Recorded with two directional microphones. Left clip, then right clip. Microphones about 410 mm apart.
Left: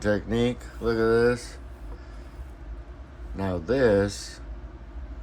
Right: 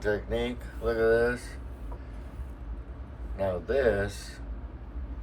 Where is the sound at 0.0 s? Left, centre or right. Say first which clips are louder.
Left 4 dB; centre.